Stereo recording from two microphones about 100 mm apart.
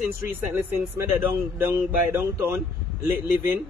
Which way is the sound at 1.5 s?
20° right (ahead or behind).